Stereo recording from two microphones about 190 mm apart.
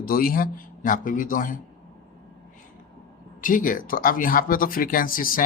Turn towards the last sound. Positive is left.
turn(degrees=45)  # may be behind; listen again after turning